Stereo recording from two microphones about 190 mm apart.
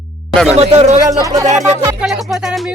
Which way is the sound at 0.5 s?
35° right (ahead or behind).